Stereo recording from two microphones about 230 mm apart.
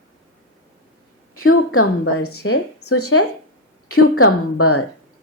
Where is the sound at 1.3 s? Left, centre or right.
Left.